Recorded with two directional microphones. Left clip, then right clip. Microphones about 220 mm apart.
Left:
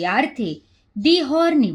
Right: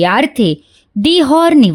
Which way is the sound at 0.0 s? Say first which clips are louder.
Right 9 dB; 50° right (ahead or behind).